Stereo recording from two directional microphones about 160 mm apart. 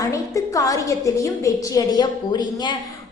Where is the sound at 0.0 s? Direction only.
20° left (ahead or behind).